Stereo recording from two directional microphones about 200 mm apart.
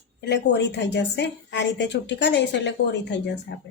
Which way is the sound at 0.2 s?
55° left (ahead or behind).